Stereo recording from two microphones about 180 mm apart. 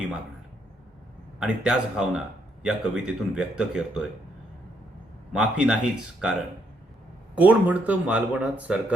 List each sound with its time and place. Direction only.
1.4 s speech: 5° right (ahead or behind)
5.3 s speech: 5° right (ahead or behind)
7.3 s speech: 10° right (ahead or behind)